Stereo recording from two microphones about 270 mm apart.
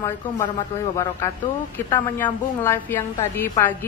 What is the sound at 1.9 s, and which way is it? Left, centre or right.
Speech, centre.